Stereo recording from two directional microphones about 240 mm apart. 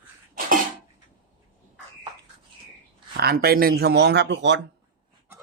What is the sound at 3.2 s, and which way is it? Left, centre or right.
Speech, right.